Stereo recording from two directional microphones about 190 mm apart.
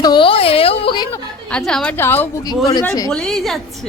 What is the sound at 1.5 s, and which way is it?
A woman's voice, 5° left (ahead or behind).